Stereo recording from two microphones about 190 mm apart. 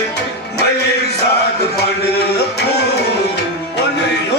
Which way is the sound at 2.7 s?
60° left (ahead or behind).